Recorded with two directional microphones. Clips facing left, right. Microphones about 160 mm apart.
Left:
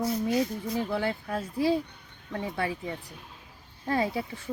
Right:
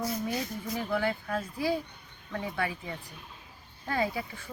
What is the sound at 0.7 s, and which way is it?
Speech, 25° left (ahead or behind).